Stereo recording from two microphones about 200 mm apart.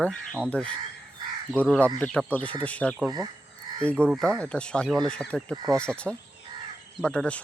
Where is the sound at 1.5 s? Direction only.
5° left (ahead or behind).